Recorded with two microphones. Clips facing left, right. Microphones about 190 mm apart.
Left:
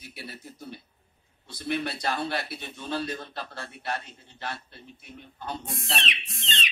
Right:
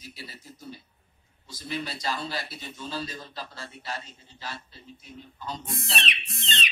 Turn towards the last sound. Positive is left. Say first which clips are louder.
# right 2 dB
turn(degrees=-50)  # may be behind; listen again after turning